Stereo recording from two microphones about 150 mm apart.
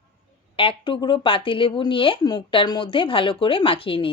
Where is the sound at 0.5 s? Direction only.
35° left (ahead or behind).